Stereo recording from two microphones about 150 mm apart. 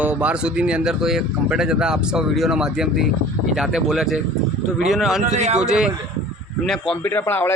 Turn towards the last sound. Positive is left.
turn(degrees=15)  # may be behind; listen again after turning